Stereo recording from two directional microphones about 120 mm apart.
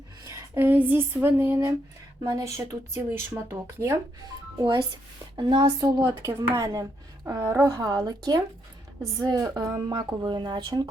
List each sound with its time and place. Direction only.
0.3 s speech: 25° right (ahead or behind)
4.6 s a woman's voice: 40° right (ahead or behind)